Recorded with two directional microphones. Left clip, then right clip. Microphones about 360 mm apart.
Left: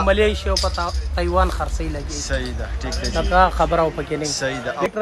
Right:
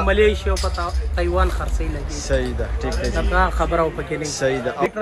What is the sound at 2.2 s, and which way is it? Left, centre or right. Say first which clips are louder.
Speech: right 6 dB; centre.